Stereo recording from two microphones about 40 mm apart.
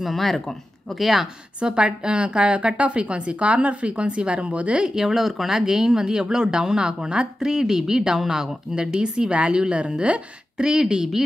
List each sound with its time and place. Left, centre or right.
0.0 s speech: centre
1.6 s a woman's voice: right
4.7 s a woman's voice: centre
7.3 s a woman's voice: centre